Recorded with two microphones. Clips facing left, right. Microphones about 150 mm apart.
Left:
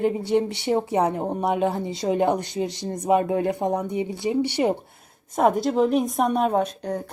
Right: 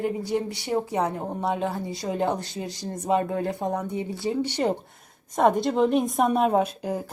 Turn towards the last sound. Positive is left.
turn(degrees=-5)  # may be behind; listen again after turning